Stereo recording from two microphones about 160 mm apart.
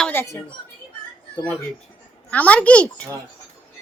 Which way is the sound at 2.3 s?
10° left (ahead or behind).